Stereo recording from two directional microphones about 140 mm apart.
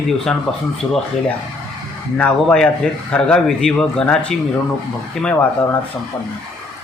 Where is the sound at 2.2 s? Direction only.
10° left (ahead or behind).